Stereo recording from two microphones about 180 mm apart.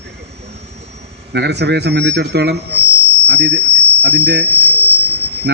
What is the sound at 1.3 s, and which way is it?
Speech, 70° right (ahead or behind).